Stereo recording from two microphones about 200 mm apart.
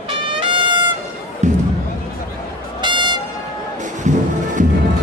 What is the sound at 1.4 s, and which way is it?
Music, 35° right (ahead or behind).